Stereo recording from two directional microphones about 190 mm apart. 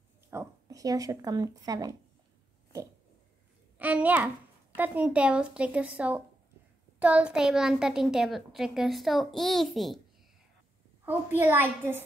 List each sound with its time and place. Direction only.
0.3 s speech: 15° right (ahead or behind)
3.7 s a woman's voice: 10° right (ahead or behind)
11.1 s speech: 10° right (ahead or behind)